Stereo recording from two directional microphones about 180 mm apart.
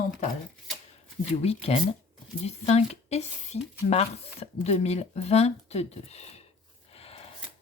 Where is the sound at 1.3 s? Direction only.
35° left (ahead or behind).